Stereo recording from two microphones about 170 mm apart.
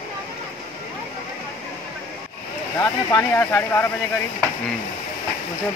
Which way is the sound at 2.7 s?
20° left (ahead or behind).